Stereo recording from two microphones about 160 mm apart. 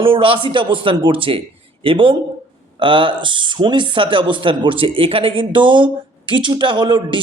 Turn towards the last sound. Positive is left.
turn(degrees=-30)  # may be behind; listen again after turning